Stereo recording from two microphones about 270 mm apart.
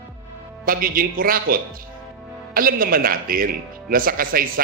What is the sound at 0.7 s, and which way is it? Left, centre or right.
A man's voice, right.